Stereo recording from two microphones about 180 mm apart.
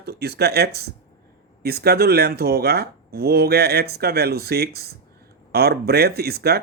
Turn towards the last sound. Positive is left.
turn(degrees=-60)  # may be behind; listen again after turning